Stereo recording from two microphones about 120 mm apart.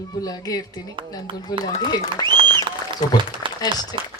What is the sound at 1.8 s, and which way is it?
Speech, 35° left (ahead or behind).